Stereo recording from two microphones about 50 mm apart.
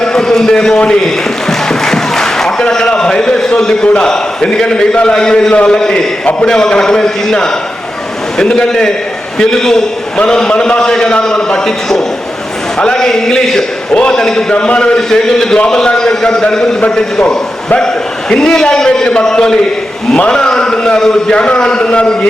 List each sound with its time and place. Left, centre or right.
0.0 s a man's voice: centre
1.5 s a sound: centre
6.4 s a man's voice: centre